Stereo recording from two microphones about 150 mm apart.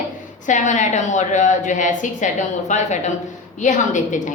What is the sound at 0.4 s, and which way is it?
A woman's voice, 55° left (ahead or behind).